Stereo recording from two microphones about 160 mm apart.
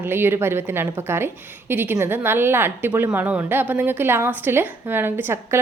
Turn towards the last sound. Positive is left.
turn(degrees=-15)  # may be behind; listen again after turning